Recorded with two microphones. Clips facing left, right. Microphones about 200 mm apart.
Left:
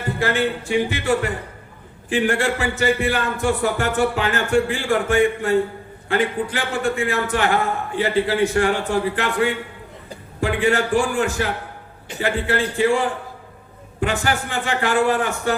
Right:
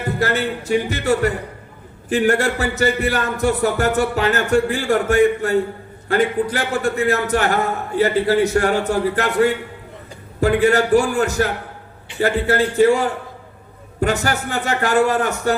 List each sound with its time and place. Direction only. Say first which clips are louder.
0.2 s speech: left 1 dB; 40° right (ahead or behind)